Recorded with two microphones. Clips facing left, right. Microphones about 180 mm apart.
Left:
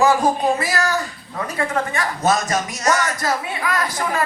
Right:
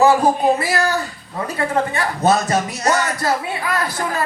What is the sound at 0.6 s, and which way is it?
Speech, 30° right (ahead or behind).